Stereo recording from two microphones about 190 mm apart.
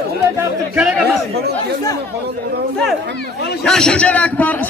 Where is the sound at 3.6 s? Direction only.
5° left (ahead or behind).